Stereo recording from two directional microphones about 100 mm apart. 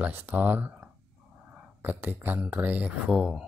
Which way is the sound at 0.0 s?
20° right (ahead or behind).